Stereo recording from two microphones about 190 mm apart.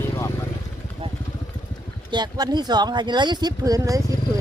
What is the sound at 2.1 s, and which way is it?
Speech, 20° right (ahead or behind).